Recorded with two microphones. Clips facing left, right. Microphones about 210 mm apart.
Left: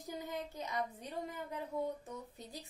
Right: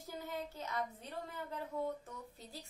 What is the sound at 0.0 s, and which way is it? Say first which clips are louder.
A woman's voice: left 1 dB; 15° left (ahead or behind).